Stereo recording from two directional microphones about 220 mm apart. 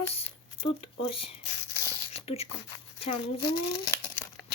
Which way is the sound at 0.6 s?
25° left (ahead or behind).